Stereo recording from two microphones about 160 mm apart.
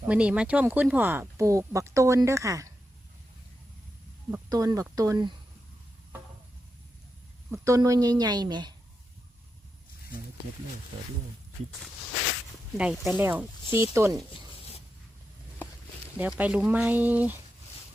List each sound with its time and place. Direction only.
0.0 s speech: 10° right (ahead or behind)
4.4 s a woman's voice: 20° right (ahead or behind)
7.5 s a woman's voice: 20° right (ahead or behind)
12.7 s speech: 5° right (ahead or behind)
16.1 s speech: 10° right (ahead or behind)